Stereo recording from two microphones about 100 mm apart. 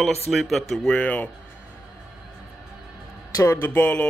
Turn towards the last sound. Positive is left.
turn(degrees=15)  # may be behind; listen again after turning